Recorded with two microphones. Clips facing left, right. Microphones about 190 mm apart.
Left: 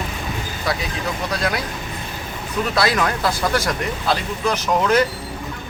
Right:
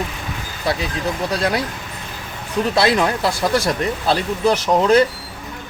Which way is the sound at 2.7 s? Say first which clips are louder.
Right 3 dB; 25° right (ahead or behind).